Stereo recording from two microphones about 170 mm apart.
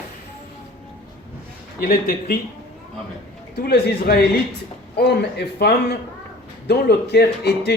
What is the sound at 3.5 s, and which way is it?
Speech, 70° left (ahead or behind).